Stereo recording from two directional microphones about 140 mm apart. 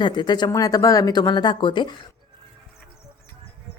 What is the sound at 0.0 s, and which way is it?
Speech, 30° left (ahead or behind).